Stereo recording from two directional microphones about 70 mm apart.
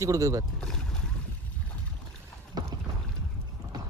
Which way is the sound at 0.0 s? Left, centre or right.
Right.